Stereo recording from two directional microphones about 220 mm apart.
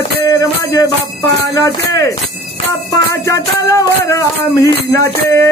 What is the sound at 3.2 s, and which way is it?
Jingle bell, 15° left (ahead or behind).